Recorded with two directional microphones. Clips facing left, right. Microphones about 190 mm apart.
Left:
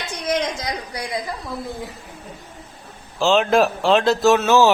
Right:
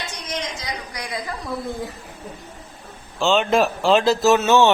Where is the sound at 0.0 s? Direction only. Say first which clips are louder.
Left 7 dB; 55° left (ahead or behind).